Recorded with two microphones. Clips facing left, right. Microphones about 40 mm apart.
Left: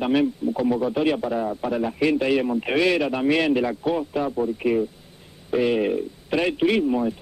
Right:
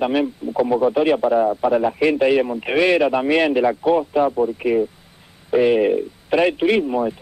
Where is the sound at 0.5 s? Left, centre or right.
Right.